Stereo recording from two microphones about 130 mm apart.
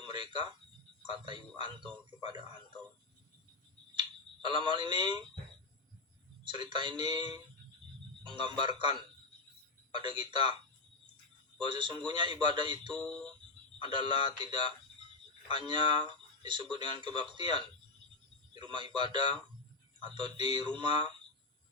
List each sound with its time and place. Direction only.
0.0 s a man's voice: 35° right (ahead or behind)
4.4 s a man's voice: 40° right (ahead or behind)
6.4 s a man's voice: 35° right (ahead or behind)
11.6 s a man's voice: 40° right (ahead or behind)
13.0 s a sound: 5° left (ahead or behind)
13.8 s a man's voice: 35° right (ahead or behind)